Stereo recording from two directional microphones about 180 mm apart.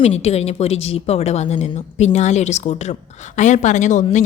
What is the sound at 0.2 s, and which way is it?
A woman's voice, 35° left (ahead or behind).